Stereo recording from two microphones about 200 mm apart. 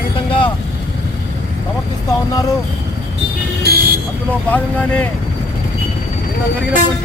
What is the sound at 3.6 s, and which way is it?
Vehicle, 50° right (ahead or behind).